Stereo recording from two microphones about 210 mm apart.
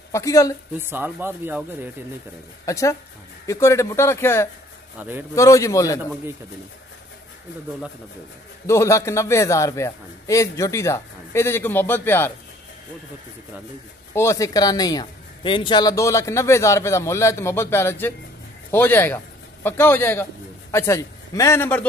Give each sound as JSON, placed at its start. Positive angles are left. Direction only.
{"t": 0.1, "sound": "speech", "side_deg": 15}
{"t": 0.7, "sound": "speech", "side_deg": -10}
{"t": 2.6, "sound": "speech", "side_deg": 15}
{"t": 5.0, "sound": "speech", "side_deg": -10}
{"t": 5.3, "sound": "speech", "side_deg": 15}
{"t": 8.6, "sound": "speech", "side_deg": 15}
{"t": 14.1, "sound": "a man's voice", "side_deg": 15}